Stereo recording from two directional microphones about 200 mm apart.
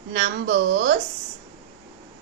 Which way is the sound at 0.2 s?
55° right (ahead or behind).